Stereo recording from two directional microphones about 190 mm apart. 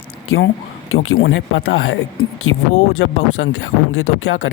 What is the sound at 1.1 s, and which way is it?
Speech, 80° left.